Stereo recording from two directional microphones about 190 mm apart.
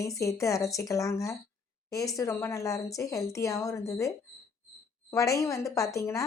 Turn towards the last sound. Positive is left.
turn(degrees=15)  # may be behind; listen again after turning